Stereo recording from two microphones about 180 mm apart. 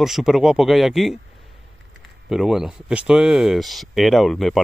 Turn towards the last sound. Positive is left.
turn(degrees=0)  # may be behind; listen again after turning